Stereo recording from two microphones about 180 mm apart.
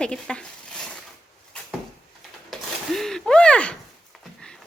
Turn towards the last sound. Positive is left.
turn(degrees=5)  # may be behind; listen again after turning